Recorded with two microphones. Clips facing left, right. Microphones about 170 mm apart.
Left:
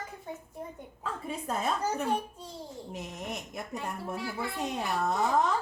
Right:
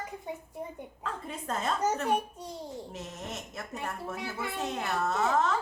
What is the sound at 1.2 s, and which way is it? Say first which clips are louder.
Speech: left 2 dB; 10° left (ahead or behind).